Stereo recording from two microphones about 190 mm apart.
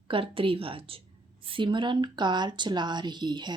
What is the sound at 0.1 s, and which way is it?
A woman's voice, 30° right (ahead or behind).